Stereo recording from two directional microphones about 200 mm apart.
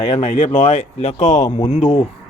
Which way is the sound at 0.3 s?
35° left (ahead or behind).